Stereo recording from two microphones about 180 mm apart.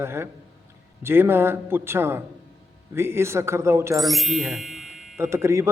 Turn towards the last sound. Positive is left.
turn(degrees=-15)  # may be behind; listen again after turning